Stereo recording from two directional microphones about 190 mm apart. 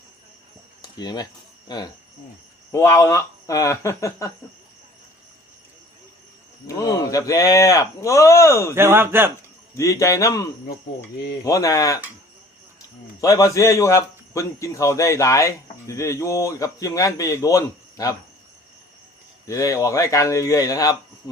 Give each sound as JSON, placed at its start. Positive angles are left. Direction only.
{"t": 0.8, "sound": "a man's voice", "side_deg": 20}
{"t": 6.7, "sound": "a man's voice", "side_deg": 20}
{"t": 8.7, "sound": "speech", "side_deg": -10}
{"t": 9.7, "sound": "a man's voice", "side_deg": 15}
{"t": 11.4, "sound": "a man's voice", "side_deg": 15}
{"t": 13.2, "sound": "a man's voice", "side_deg": 15}
{"t": 19.5, "sound": "a man's voice", "side_deg": 15}